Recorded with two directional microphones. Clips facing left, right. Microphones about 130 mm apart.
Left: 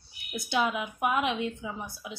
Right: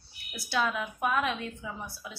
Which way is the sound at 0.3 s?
20° left (ahead or behind).